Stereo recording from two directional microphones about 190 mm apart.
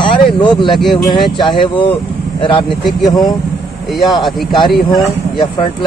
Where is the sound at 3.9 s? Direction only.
Centre (ahead or behind).